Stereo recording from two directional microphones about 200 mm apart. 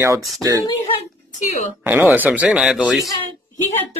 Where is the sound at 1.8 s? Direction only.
10° right (ahead or behind).